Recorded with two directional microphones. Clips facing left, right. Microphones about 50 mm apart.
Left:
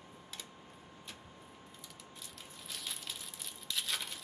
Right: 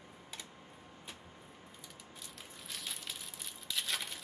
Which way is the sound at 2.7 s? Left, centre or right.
Centre.